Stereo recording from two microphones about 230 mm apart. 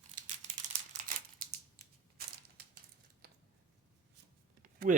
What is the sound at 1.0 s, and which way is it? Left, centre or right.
Scissors, right.